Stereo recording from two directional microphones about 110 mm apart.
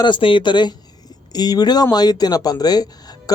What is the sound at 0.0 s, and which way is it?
Speech, 50° left (ahead or behind).